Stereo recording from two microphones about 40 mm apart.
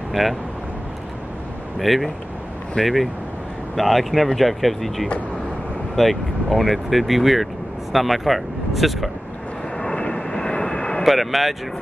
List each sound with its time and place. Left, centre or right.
0.1 s speech: centre
1.8 s speech: centre
2.8 s speech: left
3.7 s speech: centre
9.9 s vehicle: left
11.1 s speech: centre